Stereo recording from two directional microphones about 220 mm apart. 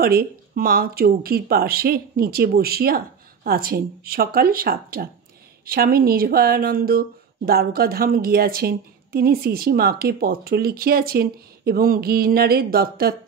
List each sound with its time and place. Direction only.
0.0 s speech: 45° right (ahead or behind)